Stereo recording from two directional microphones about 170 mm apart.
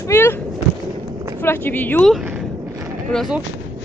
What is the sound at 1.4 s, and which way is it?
Speech, 10° left (ahead or behind).